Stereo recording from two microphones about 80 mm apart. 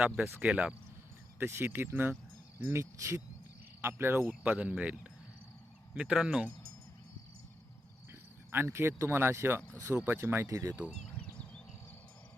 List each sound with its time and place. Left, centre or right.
0.0 s speech: centre
1.4 s speech: right
3.8 s cricket: right
4.3 s speech: centre
8.5 s speech: right
11.2 s a sound: centre